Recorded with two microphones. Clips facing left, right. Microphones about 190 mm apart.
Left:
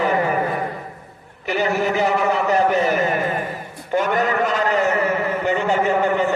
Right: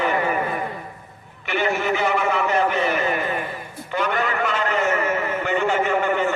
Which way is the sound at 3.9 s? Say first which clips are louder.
Left 4 dB; 45° left (ahead or behind).